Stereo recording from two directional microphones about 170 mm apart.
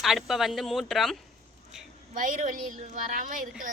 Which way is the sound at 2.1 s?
50° right (ahead or behind).